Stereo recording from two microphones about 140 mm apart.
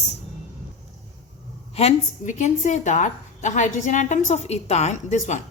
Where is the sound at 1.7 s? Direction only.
55° left (ahead or behind).